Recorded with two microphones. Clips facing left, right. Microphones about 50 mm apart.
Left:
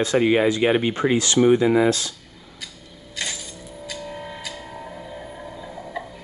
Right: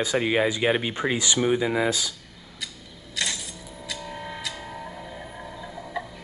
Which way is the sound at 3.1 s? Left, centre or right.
Centre.